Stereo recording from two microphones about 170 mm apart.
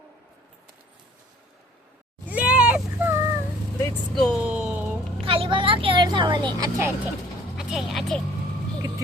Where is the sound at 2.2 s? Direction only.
10° right (ahead or behind).